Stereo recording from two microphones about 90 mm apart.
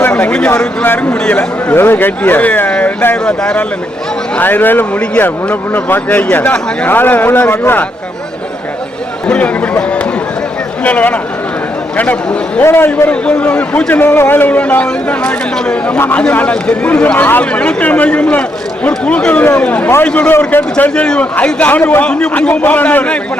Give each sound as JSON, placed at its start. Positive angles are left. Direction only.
{"t": 0.0, "sound": "a sound", "side_deg": 15}
{"t": 0.9, "sound": "a man's voice", "side_deg": 20}
{"t": 9.2, "sound": "a man's voice", "side_deg": 15}
{"t": 12.6, "sound": "a man's voice", "side_deg": 25}